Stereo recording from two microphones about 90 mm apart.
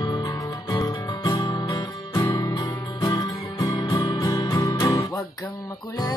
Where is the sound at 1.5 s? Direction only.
35° left (ahead or behind).